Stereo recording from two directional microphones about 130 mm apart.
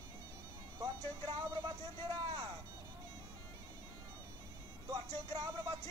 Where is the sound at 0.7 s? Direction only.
30° right (ahead or behind).